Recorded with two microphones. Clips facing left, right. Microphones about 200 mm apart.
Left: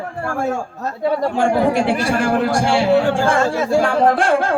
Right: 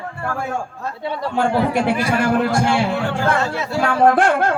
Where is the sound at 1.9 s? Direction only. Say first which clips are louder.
Left 1 dB; 50° left (ahead or behind).